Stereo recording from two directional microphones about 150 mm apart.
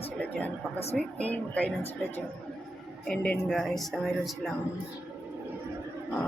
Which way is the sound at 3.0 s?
5° left (ahead or behind).